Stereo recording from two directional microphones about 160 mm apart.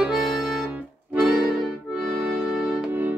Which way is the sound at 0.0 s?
Centre (ahead or behind).